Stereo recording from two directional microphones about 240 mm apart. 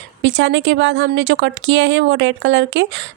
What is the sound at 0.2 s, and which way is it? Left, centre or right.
Speech, right.